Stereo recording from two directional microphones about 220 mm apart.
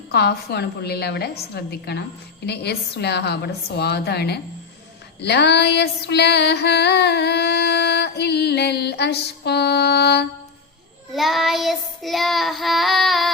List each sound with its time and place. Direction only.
0.1 s female singing: 45° left (ahead or behind)
11.1 s child singing: centre (ahead or behind)